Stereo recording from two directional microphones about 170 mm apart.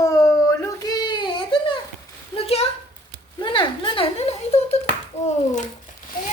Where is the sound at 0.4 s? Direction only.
20° left (ahead or behind).